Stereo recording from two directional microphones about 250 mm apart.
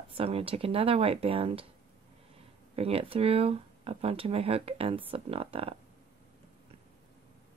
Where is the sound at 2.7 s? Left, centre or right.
Right.